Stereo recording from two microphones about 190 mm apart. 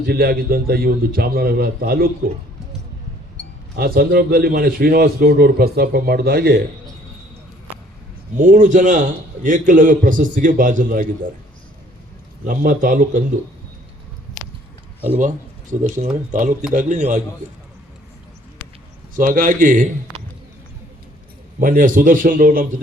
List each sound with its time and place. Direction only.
0.0 s a man's voice: 55° right (ahead or behind)
3.4 s chink: 70° left (ahead or behind)
3.8 s a man's voice: 50° right (ahead or behind)
8.4 s a man's voice: 45° right (ahead or behind)
12.5 s a man's voice: 45° right (ahead or behind)
16.3 s a man's voice: 45° right (ahead or behind)
19.1 s a man's voice: 45° right (ahead or behind)
21.6 s a man's voice: 45° right (ahead or behind)